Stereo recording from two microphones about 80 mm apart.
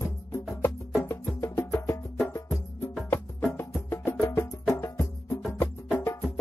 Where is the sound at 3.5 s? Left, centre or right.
Left.